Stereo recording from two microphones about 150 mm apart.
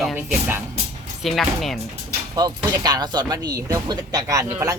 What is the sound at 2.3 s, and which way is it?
Speech, 25° right (ahead or behind).